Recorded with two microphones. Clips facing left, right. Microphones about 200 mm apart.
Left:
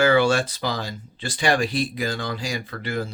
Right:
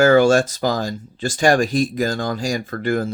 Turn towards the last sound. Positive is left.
turn(degrees=-50)  # may be behind; listen again after turning